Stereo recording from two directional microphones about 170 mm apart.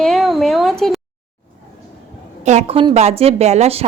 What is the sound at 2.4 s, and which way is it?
A woman's voice, 40° right (ahead or behind).